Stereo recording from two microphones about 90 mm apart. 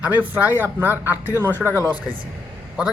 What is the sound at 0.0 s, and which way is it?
Speech, 20° right (ahead or behind).